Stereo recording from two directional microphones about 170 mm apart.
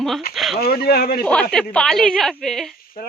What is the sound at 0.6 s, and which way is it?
Speech, 65° left (ahead or behind).